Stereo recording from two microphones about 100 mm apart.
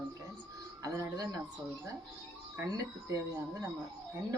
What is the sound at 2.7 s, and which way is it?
Speech, 35° right (ahead or behind).